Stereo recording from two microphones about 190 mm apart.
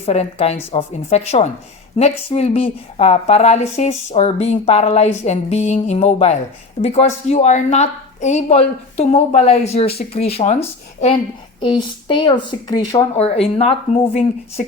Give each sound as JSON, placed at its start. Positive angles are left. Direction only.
{"t": 0.0, "sound": "a woman's voice", "side_deg": 30}
{"t": 13.1, "sound": "a woman's voice", "side_deg": 35}